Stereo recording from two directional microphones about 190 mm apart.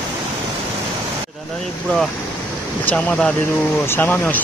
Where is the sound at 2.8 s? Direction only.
5° left (ahead or behind).